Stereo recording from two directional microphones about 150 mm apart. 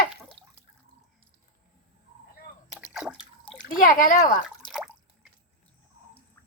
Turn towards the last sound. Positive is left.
turn(degrees=0)  # may be behind; listen again after turning